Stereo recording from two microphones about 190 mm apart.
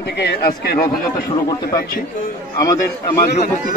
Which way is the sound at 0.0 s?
60° left (ahead or behind).